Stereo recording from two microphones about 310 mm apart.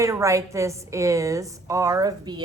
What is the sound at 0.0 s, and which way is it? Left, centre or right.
A woman's voice, centre.